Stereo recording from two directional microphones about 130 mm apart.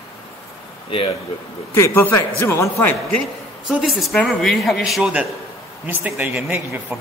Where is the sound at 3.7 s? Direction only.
Centre (ahead or behind).